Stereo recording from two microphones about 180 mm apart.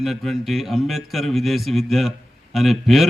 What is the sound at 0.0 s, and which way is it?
A man's voice, centre (ahead or behind).